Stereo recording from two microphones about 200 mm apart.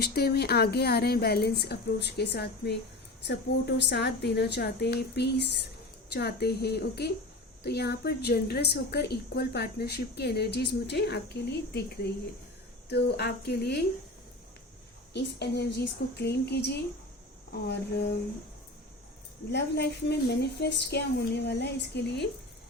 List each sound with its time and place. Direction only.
0.0 s speech: 50° left (ahead or behind)
3.8 s a woman's voice: 60° left (ahead or behind)
15.1 s a woman's voice: 55° left (ahead or behind)
19.5 s a woman's voice: 55° left (ahead or behind)